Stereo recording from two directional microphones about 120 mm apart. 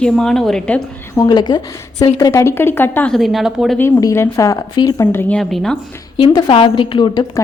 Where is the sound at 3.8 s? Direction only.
25° left (ahead or behind).